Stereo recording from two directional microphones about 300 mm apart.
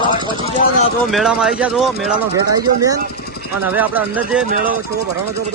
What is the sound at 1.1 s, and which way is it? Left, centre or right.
Speech, centre.